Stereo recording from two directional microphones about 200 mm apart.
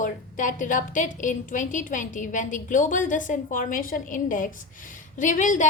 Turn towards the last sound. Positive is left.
turn(degrees=40)  # may be behind; listen again after turning